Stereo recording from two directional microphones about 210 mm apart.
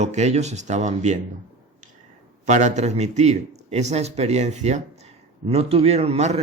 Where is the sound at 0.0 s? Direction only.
35° right (ahead or behind).